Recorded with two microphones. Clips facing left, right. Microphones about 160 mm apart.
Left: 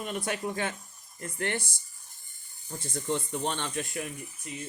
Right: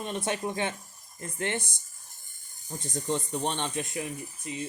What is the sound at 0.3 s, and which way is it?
Speech, 25° right (ahead or behind).